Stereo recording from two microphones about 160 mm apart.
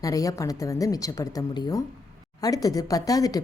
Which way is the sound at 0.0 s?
20° left (ahead or behind).